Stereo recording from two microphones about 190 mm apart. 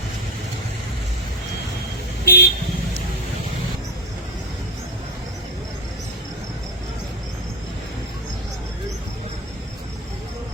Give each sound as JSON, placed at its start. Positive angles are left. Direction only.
{"t": 2.2, "sound": "speech", "side_deg": 60}